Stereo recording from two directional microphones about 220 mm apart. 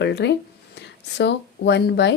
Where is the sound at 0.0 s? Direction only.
50° left (ahead or behind).